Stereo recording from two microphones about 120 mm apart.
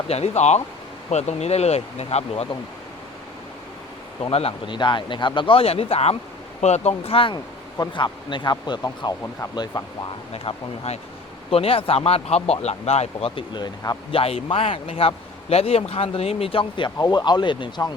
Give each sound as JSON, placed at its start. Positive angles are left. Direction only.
{"t": 0.1, "sound": "speech", "side_deg": 65}
{"t": 4.2, "sound": "speech", "side_deg": 55}
{"t": 6.6, "sound": "speech", "side_deg": 70}
{"t": 10.3, "sound": "speech", "side_deg": 60}
{"t": 14.2, "sound": "speech", "side_deg": 55}